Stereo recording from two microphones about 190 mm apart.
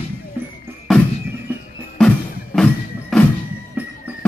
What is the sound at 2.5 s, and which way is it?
Music, 10° left (ahead or behind).